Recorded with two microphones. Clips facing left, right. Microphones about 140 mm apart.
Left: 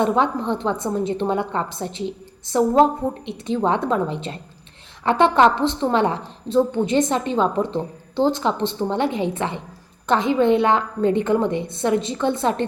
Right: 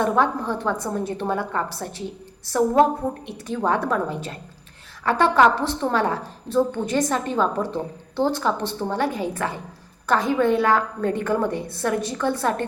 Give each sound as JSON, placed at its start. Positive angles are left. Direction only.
{"t": 0.0, "sound": "a woman's voice", "side_deg": 20}